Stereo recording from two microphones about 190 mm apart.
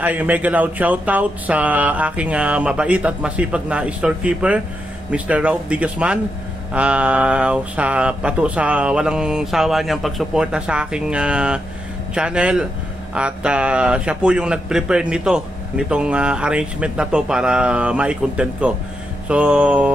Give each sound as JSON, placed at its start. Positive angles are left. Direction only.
{"t": 0.0, "sound": "a man's voice", "side_deg": -10}